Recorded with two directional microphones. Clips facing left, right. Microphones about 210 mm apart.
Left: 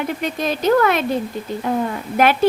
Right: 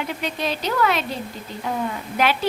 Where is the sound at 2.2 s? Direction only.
50° left (ahead or behind).